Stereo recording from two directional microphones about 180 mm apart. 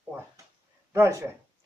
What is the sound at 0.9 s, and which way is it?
Speech, 15° right (ahead or behind).